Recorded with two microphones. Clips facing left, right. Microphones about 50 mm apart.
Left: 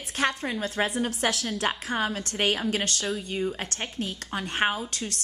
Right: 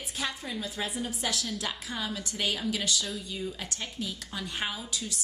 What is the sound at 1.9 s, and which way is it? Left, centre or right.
A woman's voice, left.